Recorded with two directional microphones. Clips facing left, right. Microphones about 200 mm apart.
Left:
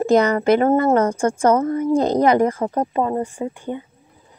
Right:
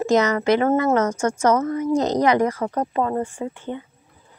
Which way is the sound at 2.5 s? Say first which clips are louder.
Left 2 dB; 25° left (ahead or behind).